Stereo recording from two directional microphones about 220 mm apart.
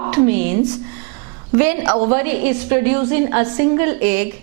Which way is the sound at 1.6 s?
10° right (ahead or behind).